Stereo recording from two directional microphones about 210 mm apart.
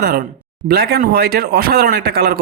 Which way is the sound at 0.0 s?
45° right (ahead or behind).